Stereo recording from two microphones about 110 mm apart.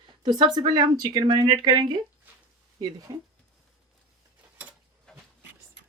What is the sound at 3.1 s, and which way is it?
Speech, 35° right (ahead or behind).